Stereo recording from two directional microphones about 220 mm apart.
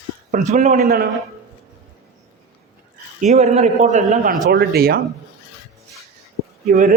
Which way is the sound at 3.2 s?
30° right (ahead or behind).